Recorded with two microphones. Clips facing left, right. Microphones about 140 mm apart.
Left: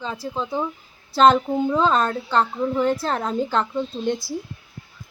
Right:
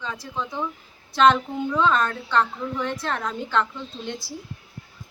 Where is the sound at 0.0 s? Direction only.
30° left (ahead or behind).